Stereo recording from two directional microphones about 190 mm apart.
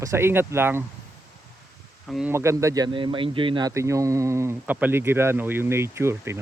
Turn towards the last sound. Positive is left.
turn(degrees=-15)  # may be behind; listen again after turning